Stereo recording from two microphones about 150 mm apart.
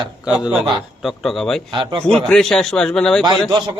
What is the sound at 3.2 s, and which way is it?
Speech, 30° right (ahead or behind).